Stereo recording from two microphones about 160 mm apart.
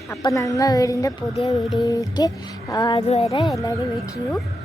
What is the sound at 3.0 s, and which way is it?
Speech, 40° left (ahead or behind).